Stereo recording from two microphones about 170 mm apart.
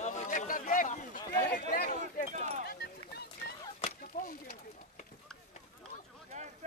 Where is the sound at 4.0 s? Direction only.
55° left (ahead or behind).